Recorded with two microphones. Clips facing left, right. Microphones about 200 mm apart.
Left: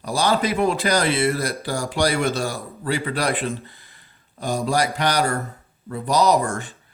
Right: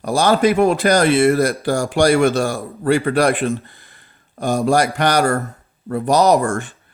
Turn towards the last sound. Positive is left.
turn(degrees=-50)  # may be behind; listen again after turning